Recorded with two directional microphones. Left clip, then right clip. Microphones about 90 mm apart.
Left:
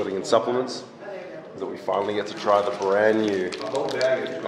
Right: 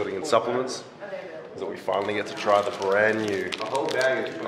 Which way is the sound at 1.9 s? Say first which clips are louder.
Left 2 dB; 25° right (ahead or behind).